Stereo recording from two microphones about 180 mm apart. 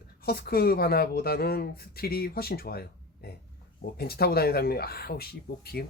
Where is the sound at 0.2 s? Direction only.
60° left (ahead or behind).